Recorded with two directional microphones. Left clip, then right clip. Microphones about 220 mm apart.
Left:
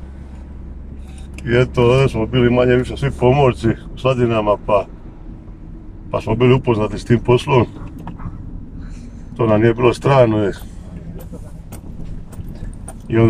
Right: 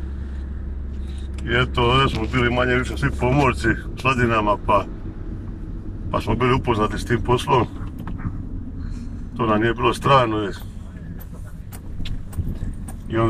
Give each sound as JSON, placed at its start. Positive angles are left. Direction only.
{"t": 1.5, "sound": "speech", "side_deg": 20}
{"t": 6.1, "sound": "speech", "side_deg": 20}
{"t": 9.4, "sound": "speech", "side_deg": 25}